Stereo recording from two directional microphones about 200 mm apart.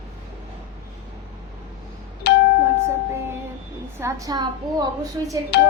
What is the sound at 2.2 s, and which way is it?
Doorbell, 55° left (ahead or behind).